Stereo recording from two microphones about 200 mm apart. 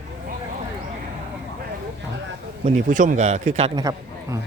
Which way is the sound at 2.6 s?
40° right (ahead or behind).